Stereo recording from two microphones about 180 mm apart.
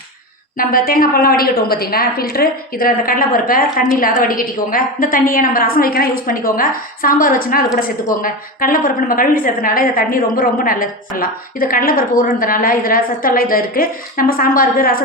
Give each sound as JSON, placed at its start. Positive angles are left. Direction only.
{"t": 0.5, "sound": "a woman's voice", "side_deg": 50}